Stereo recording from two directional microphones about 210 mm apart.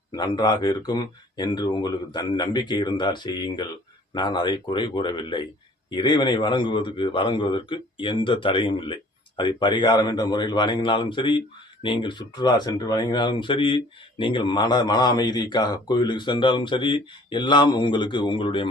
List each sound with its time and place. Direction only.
0.2 s a man's voice: 20° left (ahead or behind)